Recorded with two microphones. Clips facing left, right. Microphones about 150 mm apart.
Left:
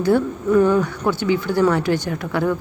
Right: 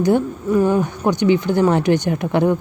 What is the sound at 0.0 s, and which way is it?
A woman's voice, 20° right (ahead or behind).